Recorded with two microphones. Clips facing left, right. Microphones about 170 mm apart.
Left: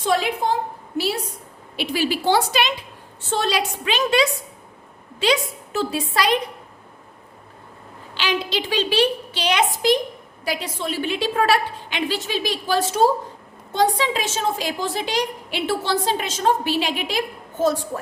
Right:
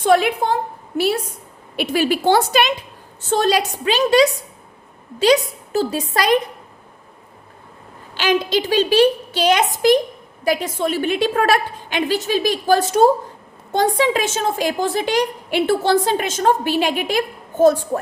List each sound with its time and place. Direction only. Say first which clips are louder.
0.0 s a woman's voice: right 5 dB; 60° right (ahead or behind)
8.1 s a woman's voice: right 6 dB; 45° right (ahead or behind)